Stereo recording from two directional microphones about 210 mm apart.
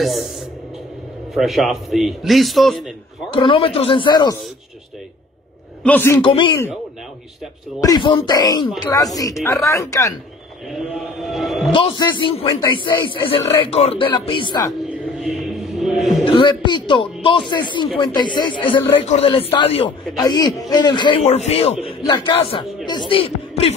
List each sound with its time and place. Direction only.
1.3 s a man's voice: centre (ahead or behind)
3.3 s a man's voice: 25° left (ahead or behind)
5.9 s speech: 10° left (ahead or behind)
6.2 s a man's voice: 25° left (ahead or behind)
7.8 s speech: 20° left (ahead or behind)
10.7 s a man's voice: centre (ahead or behind)
11.7 s a man's voice: 20° left (ahead or behind)
15.1 s music: centre (ahead or behind)
16.3 s a man's voice: 20° left (ahead or behind)